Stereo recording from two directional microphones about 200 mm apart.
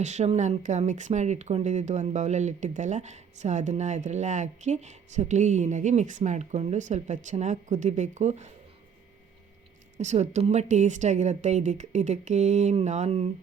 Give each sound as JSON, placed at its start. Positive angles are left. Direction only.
{"t": 0.0, "sound": "speech", "side_deg": -35}
{"t": 10.0, "sound": "speech", "side_deg": -35}